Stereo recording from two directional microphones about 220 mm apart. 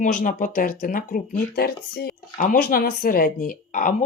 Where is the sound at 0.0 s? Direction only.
35° left (ahead or behind).